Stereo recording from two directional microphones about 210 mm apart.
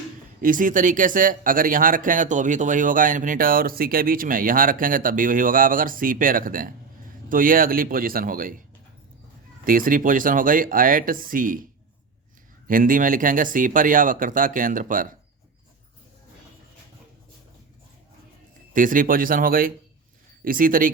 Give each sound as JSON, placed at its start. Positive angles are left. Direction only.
{"t": 0.4, "sound": "speech", "side_deg": -40}
{"t": 9.6, "sound": "speech", "side_deg": -40}
{"t": 12.6, "sound": "speech", "side_deg": -40}
{"t": 18.7, "sound": "speech", "side_deg": -40}